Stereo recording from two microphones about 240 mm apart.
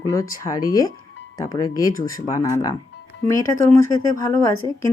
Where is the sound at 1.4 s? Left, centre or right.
Centre.